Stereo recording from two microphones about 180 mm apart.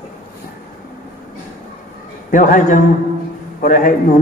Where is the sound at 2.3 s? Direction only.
45° left (ahead or behind).